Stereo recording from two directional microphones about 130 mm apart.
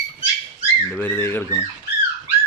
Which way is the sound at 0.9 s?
15° left (ahead or behind).